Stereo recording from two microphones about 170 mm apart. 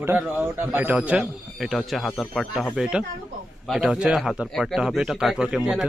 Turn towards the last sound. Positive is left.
turn(degrees=-5)  # may be behind; listen again after turning